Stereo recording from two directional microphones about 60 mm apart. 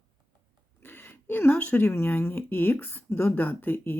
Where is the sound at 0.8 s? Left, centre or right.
Left.